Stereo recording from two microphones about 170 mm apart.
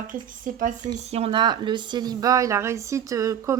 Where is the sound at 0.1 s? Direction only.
50° right (ahead or behind).